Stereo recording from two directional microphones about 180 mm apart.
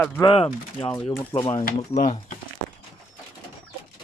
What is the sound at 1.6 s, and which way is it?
Speech, 50° left (ahead or behind).